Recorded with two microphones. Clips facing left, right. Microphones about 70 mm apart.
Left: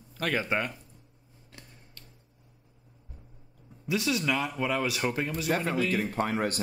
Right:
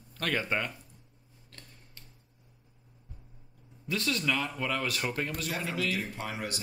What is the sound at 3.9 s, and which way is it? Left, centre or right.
Speech, centre.